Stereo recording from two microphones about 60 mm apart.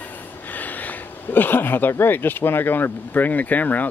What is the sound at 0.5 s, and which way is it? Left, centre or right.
Speech, left.